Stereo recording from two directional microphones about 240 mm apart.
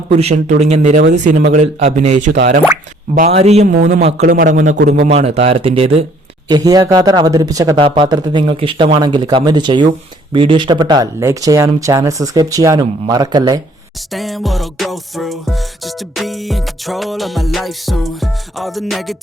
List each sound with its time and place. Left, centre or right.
0.1 s a man's voice: right
2.3 s speech: right
3.2 s a man's voice: right
14.1 s music: centre